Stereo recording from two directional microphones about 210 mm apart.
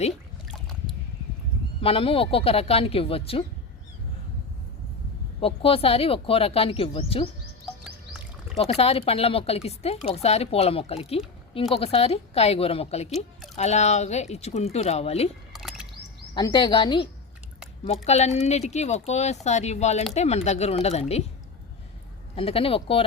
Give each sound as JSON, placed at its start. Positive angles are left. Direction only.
{"t": 1.8, "sound": "speech", "side_deg": 25}
{"t": 5.4, "sound": "speech", "side_deg": 25}
{"t": 8.5, "sound": "speech", "side_deg": 30}
{"t": 15.5, "sound": "a sound", "side_deg": 0}
{"t": 16.3, "sound": "speech", "side_deg": 20}
{"t": 22.4, "sound": "speech", "side_deg": 25}